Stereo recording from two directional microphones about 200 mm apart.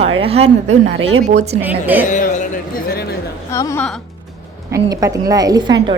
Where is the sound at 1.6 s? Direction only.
10° right (ahead or behind).